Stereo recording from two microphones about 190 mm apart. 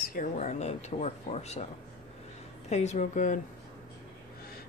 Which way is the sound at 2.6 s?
35° left (ahead or behind).